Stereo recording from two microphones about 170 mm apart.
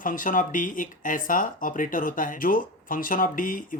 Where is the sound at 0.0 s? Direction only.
55° left (ahead or behind).